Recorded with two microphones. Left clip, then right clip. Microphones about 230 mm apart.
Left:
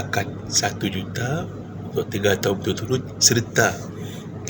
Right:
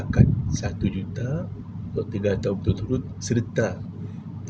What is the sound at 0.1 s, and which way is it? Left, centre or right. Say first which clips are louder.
Speech: left 2 dB; centre.